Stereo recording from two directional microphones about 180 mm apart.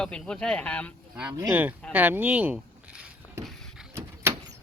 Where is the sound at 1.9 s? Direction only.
10° right (ahead or behind).